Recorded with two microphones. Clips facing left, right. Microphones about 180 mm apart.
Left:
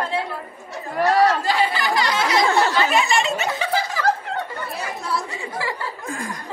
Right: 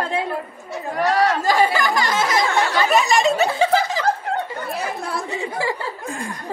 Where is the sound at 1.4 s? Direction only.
45° right (ahead or behind).